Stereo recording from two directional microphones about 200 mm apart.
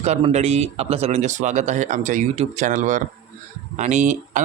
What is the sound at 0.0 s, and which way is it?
Speech, 35° right (ahead or behind).